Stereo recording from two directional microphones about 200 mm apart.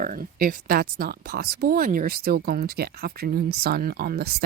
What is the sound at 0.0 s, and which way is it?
Speech, 45° right (ahead or behind).